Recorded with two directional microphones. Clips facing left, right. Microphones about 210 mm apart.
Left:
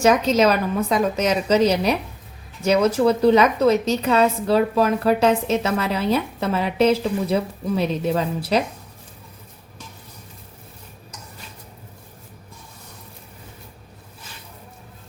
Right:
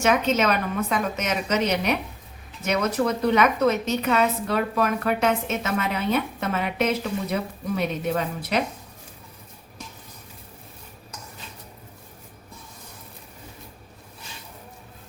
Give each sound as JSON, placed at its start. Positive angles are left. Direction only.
{"t": 0.0, "sound": "a woman's voice", "side_deg": 35}